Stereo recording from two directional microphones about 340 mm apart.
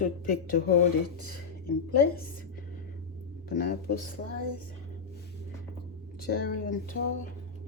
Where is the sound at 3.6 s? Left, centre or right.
Left.